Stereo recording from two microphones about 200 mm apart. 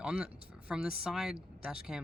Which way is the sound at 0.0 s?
5° right (ahead or behind).